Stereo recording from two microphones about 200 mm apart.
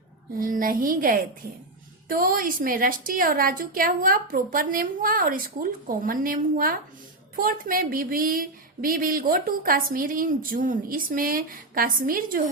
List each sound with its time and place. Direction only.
0.3 s a woman's voice: 45° right (ahead or behind)